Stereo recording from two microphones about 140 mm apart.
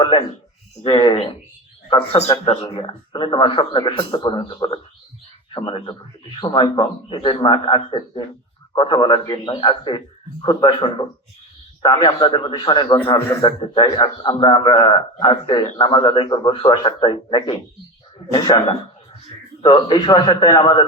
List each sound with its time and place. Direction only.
0.0 s a man's voice: 35° left (ahead or behind)
13.1 s a man's voice: 25° left (ahead or behind)
13.6 s a man's voice: 40° left (ahead or behind)